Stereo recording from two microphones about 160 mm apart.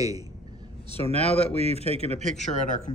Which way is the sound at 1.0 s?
40° left (ahead or behind).